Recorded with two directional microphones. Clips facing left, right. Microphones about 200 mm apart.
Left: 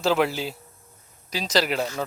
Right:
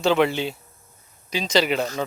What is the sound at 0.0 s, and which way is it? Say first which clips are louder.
Speech: right 3 dB; 5° left (ahead or behind).